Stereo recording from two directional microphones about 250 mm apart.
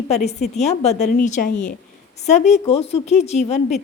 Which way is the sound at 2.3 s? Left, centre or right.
Left.